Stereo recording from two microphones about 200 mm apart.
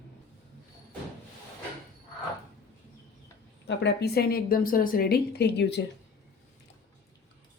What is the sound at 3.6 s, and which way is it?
Speech, 55° left (ahead or behind).